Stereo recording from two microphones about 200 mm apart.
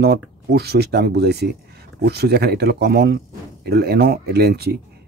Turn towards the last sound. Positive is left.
turn(degrees=-55)  # may be behind; listen again after turning